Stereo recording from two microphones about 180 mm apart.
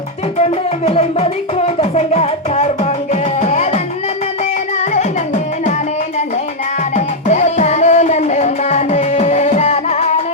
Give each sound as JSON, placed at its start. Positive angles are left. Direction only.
{"t": 0.9, "sound": "music", "side_deg": 35}
{"t": 6.9, "sound": "music", "side_deg": 40}